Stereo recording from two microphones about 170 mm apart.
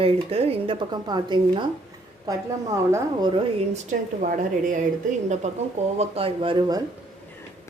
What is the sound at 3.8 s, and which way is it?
Speech, 50° right (ahead or behind).